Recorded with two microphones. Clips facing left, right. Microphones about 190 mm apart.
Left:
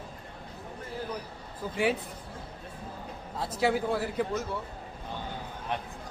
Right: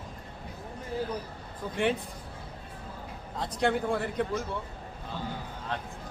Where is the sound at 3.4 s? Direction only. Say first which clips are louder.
Even; 5° left (ahead or behind).